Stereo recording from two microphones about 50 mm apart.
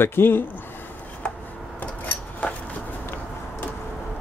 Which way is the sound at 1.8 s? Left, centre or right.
Left.